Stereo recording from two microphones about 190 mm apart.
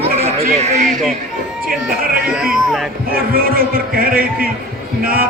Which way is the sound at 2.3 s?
5° right (ahead or behind).